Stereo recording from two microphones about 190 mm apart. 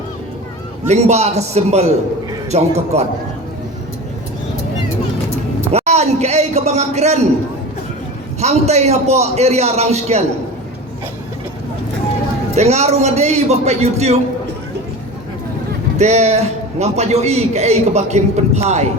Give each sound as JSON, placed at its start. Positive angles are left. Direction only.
{"t": 0.9, "sound": "a man's voice", "side_deg": -35}
{"t": 5.7, "sound": "a man's voice", "side_deg": -35}
{"t": 8.4, "sound": "a man's voice", "side_deg": -35}
{"t": 12.5, "sound": "a man's voice", "side_deg": -35}
{"t": 16.0, "sound": "a man's voice", "side_deg": -35}